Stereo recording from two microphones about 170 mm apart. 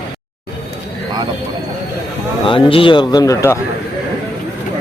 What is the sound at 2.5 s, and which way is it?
Speech, 30° left (ahead or behind).